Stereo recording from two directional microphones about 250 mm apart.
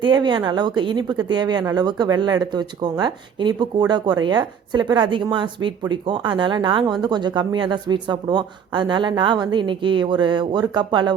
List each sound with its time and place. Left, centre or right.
0.0 s speech: centre